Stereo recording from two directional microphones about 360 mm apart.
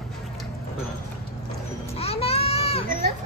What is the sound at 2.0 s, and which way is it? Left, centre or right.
Baby cry, centre.